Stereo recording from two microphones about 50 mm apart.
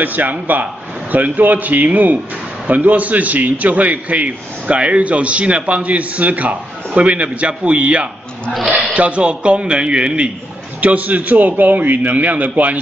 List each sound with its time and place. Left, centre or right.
0.0 s a man's voice: right; by 10.3 s centre
10.8 s a man's voice: right